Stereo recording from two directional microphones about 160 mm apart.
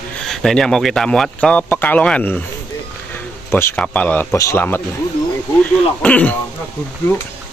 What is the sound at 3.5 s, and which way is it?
Speech, 15° left (ahead or behind).